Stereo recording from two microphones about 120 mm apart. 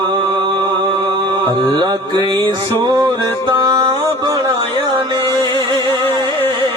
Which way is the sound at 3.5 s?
40° right (ahead or behind).